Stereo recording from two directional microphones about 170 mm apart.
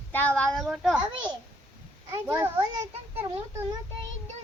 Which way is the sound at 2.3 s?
15° right (ahead or behind).